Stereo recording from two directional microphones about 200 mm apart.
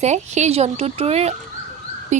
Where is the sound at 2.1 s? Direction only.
35° right (ahead or behind).